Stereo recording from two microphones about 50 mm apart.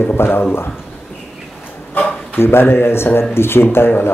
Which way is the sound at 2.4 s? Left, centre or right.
Left.